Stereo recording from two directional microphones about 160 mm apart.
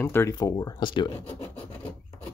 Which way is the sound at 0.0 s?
15° left (ahead or behind).